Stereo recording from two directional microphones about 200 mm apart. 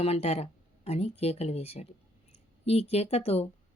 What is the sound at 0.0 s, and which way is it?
Speech, 30° left (ahead or behind).